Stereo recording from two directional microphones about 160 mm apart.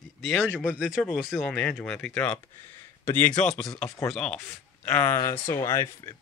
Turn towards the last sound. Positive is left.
turn(degrees=20)  # may be behind; listen again after turning